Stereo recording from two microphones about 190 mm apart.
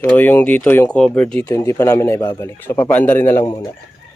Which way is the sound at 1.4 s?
15° left (ahead or behind).